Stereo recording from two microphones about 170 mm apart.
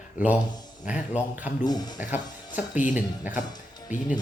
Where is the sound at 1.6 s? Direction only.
25° left (ahead or behind).